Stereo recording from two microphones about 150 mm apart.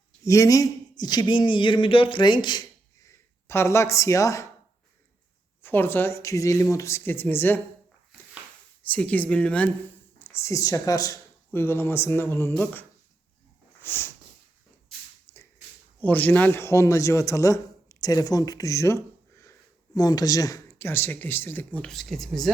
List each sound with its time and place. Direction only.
0.2 s speech: 20° left (ahead or behind)
5.6 s speech: 15° left (ahead or behind)
8.8 s speech: 10° left (ahead or behind)
13.7 s a sound: 15° left (ahead or behind)
15.3 s a sound: 15° left (ahead or behind)
16.0 s a man's voice: 10° left (ahead or behind)